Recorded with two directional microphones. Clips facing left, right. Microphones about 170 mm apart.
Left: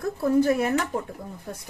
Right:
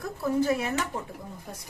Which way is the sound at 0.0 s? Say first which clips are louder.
Left 5 dB; 55° left (ahead or behind).